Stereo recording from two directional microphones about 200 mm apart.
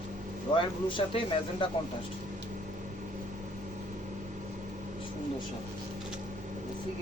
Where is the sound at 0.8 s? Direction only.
25° left (ahead or behind).